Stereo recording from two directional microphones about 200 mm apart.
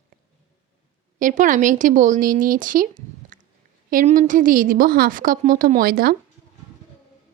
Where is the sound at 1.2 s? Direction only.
40° right (ahead or behind).